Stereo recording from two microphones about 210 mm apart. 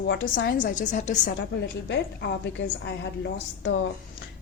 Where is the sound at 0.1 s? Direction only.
55° left (ahead or behind).